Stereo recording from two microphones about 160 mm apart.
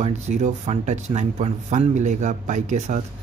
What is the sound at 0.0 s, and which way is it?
Speech, 45° right (ahead or behind).